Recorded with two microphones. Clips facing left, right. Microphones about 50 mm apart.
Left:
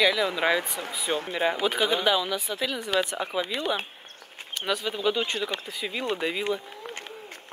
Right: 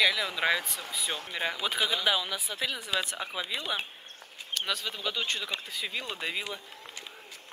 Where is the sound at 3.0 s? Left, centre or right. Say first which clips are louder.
Left 9 dB; centre.